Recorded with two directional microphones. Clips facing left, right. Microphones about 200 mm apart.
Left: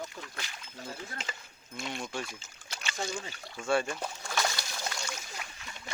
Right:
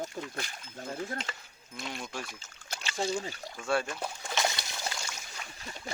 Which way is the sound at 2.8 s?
30° right (ahead or behind).